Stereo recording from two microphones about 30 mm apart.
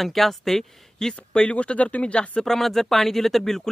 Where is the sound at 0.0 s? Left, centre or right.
Centre.